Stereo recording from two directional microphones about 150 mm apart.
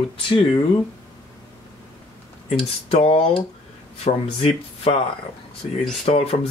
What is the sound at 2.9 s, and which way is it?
Speech, 40° left (ahead or behind).